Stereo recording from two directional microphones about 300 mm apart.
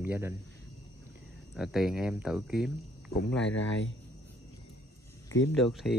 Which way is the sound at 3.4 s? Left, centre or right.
Left.